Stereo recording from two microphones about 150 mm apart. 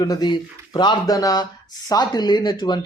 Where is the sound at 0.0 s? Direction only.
25° left (ahead or behind).